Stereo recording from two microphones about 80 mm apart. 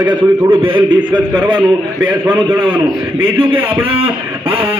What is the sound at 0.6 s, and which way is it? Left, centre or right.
Speech, right.